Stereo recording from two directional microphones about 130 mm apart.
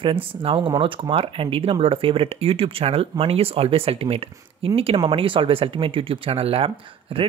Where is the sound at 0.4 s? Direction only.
45° right (ahead or behind).